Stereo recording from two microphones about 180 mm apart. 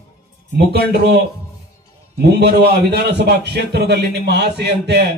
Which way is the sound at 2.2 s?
65° right (ahead or behind).